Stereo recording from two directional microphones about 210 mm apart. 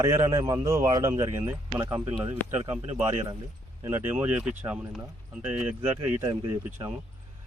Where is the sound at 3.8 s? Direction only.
10° right (ahead or behind).